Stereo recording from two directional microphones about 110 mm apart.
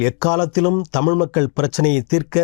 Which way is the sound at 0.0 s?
10° left (ahead or behind).